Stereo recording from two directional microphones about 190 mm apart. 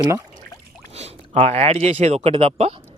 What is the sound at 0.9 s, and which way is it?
Speech, 35° right (ahead or behind).